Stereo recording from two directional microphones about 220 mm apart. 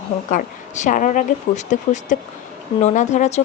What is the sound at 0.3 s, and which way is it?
Speech, 35° left (ahead or behind).